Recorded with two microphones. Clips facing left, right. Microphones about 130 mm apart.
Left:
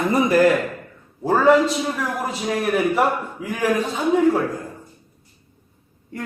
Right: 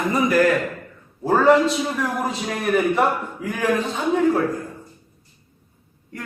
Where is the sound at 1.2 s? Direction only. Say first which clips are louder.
Even; centre (ahead or behind).